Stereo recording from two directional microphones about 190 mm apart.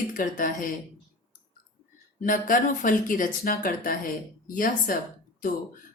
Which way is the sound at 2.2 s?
45° left (ahead or behind).